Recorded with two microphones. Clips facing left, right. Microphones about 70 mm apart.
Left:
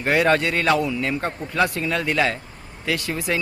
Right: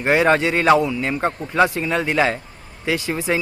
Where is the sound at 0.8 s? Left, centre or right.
Centre.